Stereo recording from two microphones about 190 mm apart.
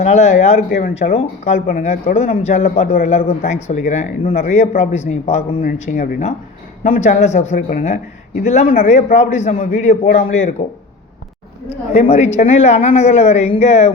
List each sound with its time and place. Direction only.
0.0 s speech: 35° left (ahead or behind)
2.8 s a man's voice: 50° left (ahead or behind)
3.1 s speech: 35° left (ahead or behind)
11.7 s speech: 35° left (ahead or behind)